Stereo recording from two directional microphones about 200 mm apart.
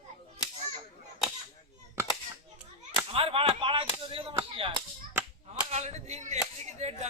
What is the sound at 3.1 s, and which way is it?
Whip, 30° right (ahead or behind).